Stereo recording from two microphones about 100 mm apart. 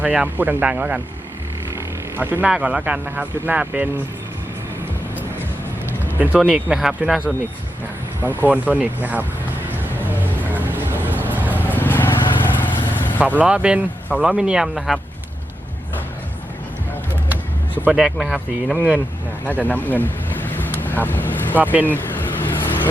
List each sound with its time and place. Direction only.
0.0 s speech: 15° right (ahead or behind)
2.1 s speech: 20° right (ahead or behind)
6.1 s speech: 15° right (ahead or behind)
8.2 s speech: 20° right (ahead or behind)
10.5 s music: 20° right (ahead or behind)
11.6 s vehicle: 20° left (ahead or behind)
13.4 s speech: 10° right (ahead or behind)
17.9 s speech: 5° right (ahead or behind)
19.5 s speech: 15° left (ahead or behind)
21.6 s speech: 15° right (ahead or behind)
21.8 s vehicle: 20° left (ahead or behind)